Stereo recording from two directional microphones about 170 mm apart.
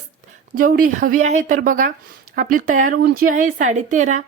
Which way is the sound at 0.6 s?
55° right (ahead or behind).